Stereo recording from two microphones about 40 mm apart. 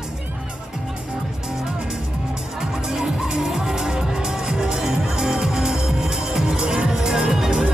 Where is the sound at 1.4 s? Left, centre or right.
Centre.